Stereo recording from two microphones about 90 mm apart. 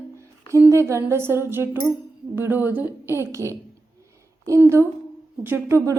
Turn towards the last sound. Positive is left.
turn(degrees=-20)  # may be behind; listen again after turning